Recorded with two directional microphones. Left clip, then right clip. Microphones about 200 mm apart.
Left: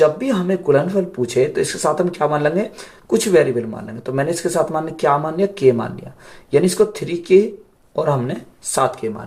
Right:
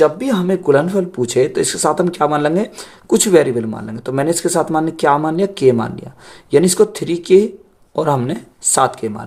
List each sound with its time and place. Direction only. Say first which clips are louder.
0.0 s speech: right 1 dB; 45° right (ahead or behind)